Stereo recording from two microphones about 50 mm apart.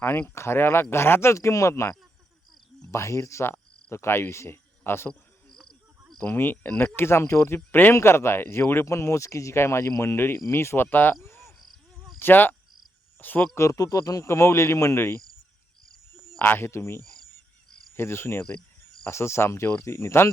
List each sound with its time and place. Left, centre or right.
0.0 s speech: left
0.3 s speech: left
1.3 s speech: left
3.9 s speech: left
5.5 s a sound: centre
6.3 s speech: left
7.5 s speech: left
7.9 s speech: left
10.8 s speech: left
12.2 s cricket: left
13.1 s speech: left
14.2 s speech: left
14.9 s speech: left
16.4 s speech: left